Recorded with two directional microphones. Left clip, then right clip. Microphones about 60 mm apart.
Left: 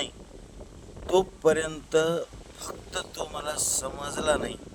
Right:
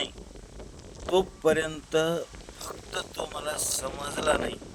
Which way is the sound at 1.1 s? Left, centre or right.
Left.